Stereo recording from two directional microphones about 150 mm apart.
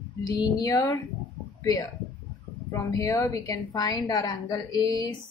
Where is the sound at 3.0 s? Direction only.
20° left (ahead or behind).